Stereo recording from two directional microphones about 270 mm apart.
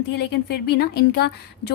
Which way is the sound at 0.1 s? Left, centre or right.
Left.